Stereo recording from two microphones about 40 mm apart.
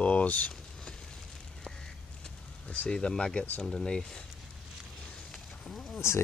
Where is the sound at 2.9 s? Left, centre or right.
Left.